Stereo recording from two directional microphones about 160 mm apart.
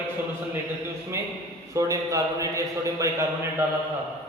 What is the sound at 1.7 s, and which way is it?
A man's voice, 20° right (ahead or behind).